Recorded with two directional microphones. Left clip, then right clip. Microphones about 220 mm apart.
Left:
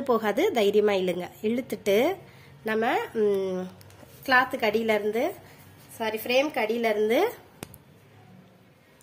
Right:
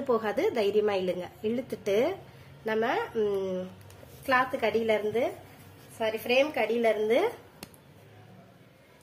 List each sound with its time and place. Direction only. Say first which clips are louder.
0.0 s a woman's voice: left 3 dB; 40° left (ahead or behind)